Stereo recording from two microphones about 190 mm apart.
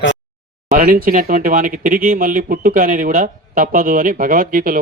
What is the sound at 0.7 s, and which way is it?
Speech, 45° right (ahead or behind).